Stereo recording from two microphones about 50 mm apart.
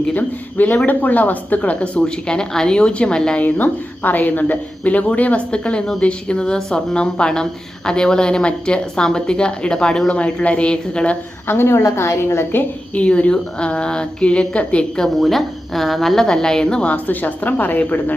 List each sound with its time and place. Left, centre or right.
0.0 s a woman's voice: left; by 3.4 s centre
3.4 s a woman's voice: left
11.4 s a woman's voice: left
12.9 s a woman's voice: left
14.9 s a woman's voice: centre
16.9 s a woman's voice: left